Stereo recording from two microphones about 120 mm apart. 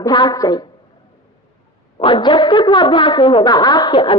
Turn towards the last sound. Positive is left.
turn(degrees=40)  # may be behind; listen again after turning